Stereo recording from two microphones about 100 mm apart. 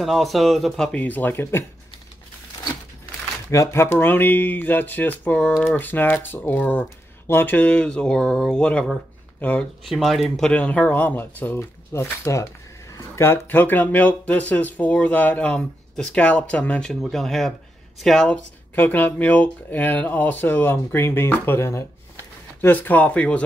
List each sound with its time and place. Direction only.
0.0 s speech: centre (ahead or behind)
1.0 s speech: 20° left (ahead or behind)
3.4 s speech: 30° left (ahead or behind); by 9.7 s 15° left (ahead or behind)
9.8 s speech: centre (ahead or behind)
10.5 s speech: 15° left (ahead or behind)
18.8 s speech: 20° left (ahead or behind)